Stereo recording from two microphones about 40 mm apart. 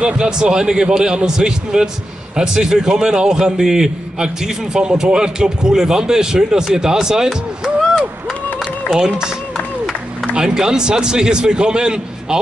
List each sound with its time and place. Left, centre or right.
0.0 s a man's voice: centre
10.3 s a man's voice: centre